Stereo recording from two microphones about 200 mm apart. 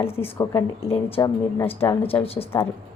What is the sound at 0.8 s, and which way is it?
Speech, 30° left (ahead or behind).